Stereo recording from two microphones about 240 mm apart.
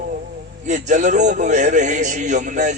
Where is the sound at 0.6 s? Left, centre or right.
Right.